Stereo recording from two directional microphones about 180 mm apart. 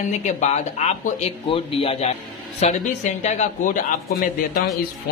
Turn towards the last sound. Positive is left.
turn(degrees=50)  # may be behind; listen again after turning